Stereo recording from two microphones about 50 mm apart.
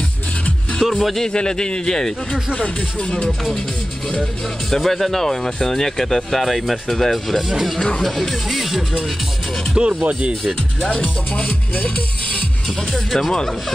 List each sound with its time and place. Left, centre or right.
0.7 s speech: centre
1.2 s a man's voice: centre
4.1 s speech: centre
9.8 s speech: centre
10.8 s a man's voice: centre
12.9 s speech: centre